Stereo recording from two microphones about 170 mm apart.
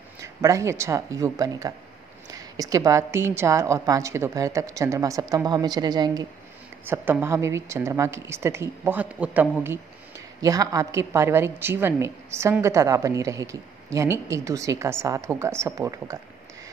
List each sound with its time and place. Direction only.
0.2 s a woman's voice: 20° right (ahead or behind)
6.8 s a woman's voice: 10° right (ahead or behind)